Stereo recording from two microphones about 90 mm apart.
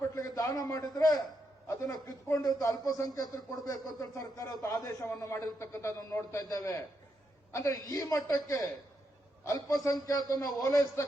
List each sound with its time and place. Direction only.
0.2 s a man's voice: 40° left (ahead or behind)
6.3 s a man's voice: 40° left (ahead or behind)